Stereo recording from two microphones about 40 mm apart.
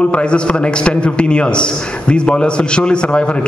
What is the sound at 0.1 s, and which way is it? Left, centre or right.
A man's voice, left.